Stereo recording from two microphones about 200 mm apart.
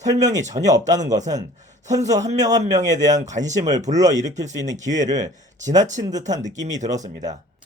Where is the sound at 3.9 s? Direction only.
20° right (ahead or behind).